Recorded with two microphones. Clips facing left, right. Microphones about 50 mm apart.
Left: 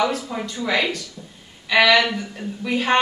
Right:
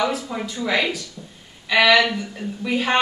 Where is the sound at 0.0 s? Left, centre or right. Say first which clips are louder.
Left 1 dB; centre.